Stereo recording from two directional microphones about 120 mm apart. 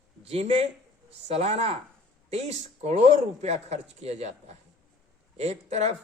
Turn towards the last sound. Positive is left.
turn(degrees=-70)  # may be behind; listen again after turning